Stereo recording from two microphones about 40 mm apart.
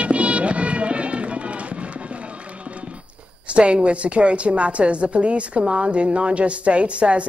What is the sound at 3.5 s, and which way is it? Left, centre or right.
A woman's voice, right.